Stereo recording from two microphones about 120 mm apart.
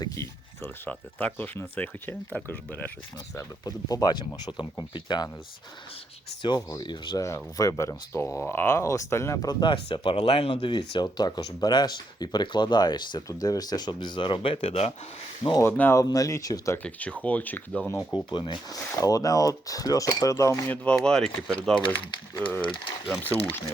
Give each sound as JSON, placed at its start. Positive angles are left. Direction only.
{"t": 0.0, "sound": "a sound", "side_deg": 25}
{"t": 0.9, "sound": "speech", "side_deg": 15}
{"t": 3.3, "sound": "speech", "side_deg": 30}
{"t": 6.4, "sound": "speech", "side_deg": 35}
{"t": 7.2, "sound": "speech", "side_deg": 25}
{"t": 15.5, "sound": "speech", "side_deg": 20}
{"t": 16.7, "sound": "speech", "side_deg": 10}
{"t": 18.3, "sound": "speech", "side_deg": 40}
{"t": 18.9, "sound": "speech", "side_deg": 30}
{"t": 20.7, "sound": "speech", "side_deg": 10}
{"t": 22.4, "sound": "speech", "side_deg": 15}
{"t": 22.6, "sound": "speech", "side_deg": 45}